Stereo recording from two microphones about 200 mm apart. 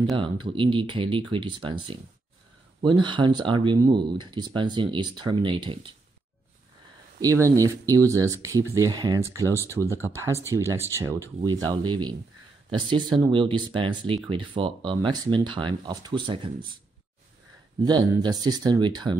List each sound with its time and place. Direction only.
0.2 s speech: 25° right (ahead or behind)
7.2 s speech: 15° right (ahead or behind)
17.8 s speech: 20° right (ahead or behind)